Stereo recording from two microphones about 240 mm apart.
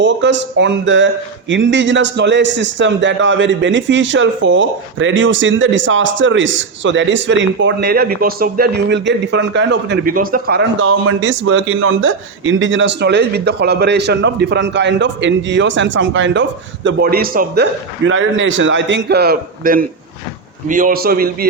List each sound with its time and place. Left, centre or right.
0.0 s a man's voice: right